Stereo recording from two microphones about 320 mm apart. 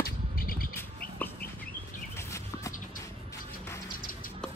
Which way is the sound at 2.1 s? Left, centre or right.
Centre.